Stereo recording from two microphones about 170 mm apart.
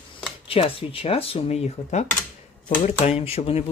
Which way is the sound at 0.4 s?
35° left (ahead or behind).